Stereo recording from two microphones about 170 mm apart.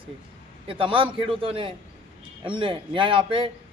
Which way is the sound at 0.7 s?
30° right (ahead or behind).